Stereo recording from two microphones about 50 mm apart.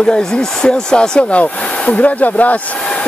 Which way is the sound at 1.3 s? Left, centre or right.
Left.